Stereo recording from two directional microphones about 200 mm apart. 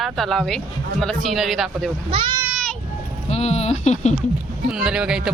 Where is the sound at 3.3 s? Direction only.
30° left (ahead or behind).